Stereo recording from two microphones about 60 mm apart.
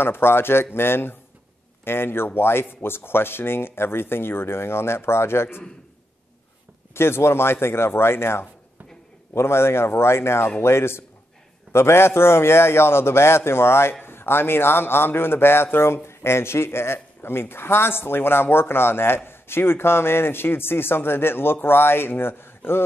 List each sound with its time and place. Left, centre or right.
0.0 s a man's voice: left
6.9 s a man's voice: left